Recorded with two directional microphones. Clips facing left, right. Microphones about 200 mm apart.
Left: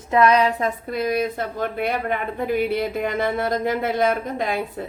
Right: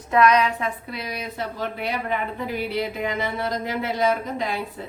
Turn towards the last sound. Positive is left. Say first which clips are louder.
# left 3 dB
turn(degrees=55)  # may be behind; listen again after turning